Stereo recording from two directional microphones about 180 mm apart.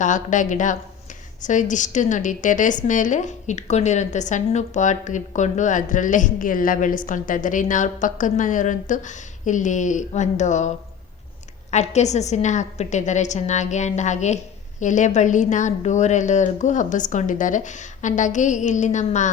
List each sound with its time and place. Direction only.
0.0 s a woman's voice: 45° left (ahead or behind)
11.7 s a woman's voice: 40° left (ahead or behind)